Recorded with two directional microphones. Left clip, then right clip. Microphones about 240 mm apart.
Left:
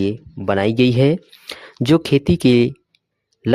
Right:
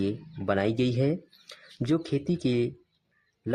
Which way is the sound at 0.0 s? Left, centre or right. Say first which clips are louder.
Left 9 dB; left.